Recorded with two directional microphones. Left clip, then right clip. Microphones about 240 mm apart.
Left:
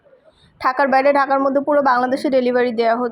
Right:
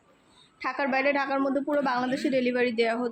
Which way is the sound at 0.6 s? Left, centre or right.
Centre.